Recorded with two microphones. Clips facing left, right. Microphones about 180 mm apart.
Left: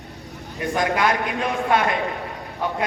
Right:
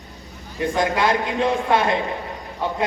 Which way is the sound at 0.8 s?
25° right (ahead or behind).